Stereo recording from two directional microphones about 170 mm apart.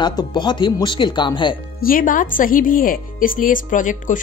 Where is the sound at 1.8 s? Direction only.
55° left (ahead or behind).